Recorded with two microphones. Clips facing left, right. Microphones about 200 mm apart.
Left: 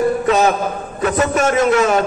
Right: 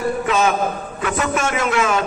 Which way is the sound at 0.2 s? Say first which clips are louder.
Left 3 dB; 40° left (ahead or behind).